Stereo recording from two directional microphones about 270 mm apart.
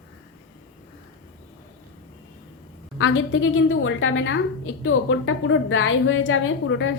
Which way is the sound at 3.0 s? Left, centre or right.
Left.